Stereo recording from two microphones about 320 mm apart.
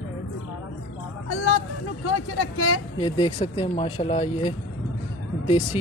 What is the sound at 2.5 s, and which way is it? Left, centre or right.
Speech, left.